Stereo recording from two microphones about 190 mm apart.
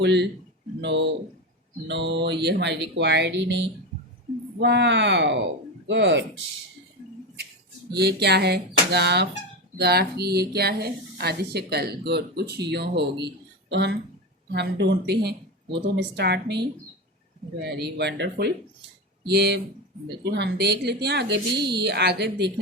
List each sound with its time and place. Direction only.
0.0 s speech: 65° right (ahead or behind)
4.6 s speech: 65° right (ahead or behind)
7.9 s speech: 60° right (ahead or behind)